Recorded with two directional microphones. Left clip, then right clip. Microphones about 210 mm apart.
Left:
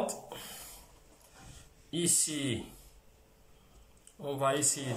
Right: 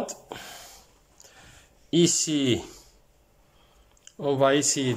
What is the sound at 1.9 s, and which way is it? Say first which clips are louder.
Speech: right 11 dB; 50° right (ahead or behind).